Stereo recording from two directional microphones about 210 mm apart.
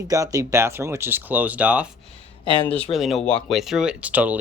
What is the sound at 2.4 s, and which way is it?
Speech, 20° left (ahead or behind).